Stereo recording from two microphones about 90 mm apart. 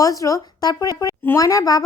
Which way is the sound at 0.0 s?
40° left (ahead or behind).